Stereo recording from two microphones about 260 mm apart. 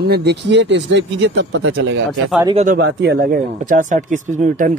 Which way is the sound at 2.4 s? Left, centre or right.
Right.